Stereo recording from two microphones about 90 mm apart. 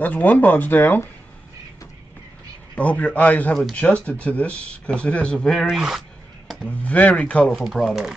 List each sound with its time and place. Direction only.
0.0 s speech: 15° left (ahead or behind)
2.7 s speech: 15° left (ahead or behind)
5.8 s a sound: 5° right (ahead or behind)
6.6 s speech: 15° left (ahead or behind)
7.5 s speech: centre (ahead or behind)